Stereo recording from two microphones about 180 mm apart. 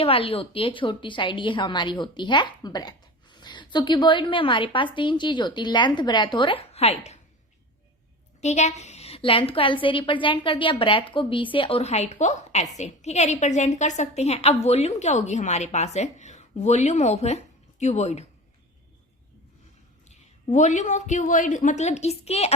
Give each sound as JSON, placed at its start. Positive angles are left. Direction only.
{"t": 0.0, "sound": "a woman's voice", "side_deg": 30}
{"t": 8.4, "sound": "a woman's voice", "side_deg": 40}
{"t": 20.1, "sound": "a woman's voice", "side_deg": 40}